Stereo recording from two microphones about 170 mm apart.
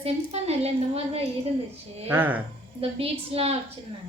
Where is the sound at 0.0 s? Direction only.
40° right (ahead or behind).